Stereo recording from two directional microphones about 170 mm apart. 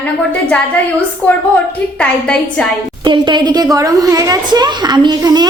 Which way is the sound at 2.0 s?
5° left (ahead or behind).